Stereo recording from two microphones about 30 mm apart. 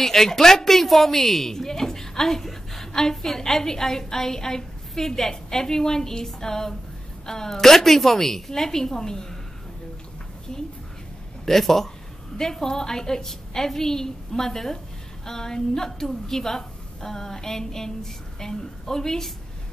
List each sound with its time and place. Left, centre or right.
0.0 s a woman's voice: centre
10.5 s a woman's voice: centre